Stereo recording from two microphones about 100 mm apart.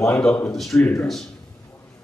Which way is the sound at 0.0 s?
10° left (ahead or behind).